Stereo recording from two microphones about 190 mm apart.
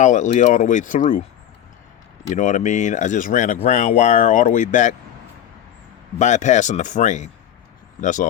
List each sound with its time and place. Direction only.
0.0 s speech: 40° left (ahead or behind)
2.3 s speech: 40° left (ahead or behind)
6.1 s speech: 40° left (ahead or behind)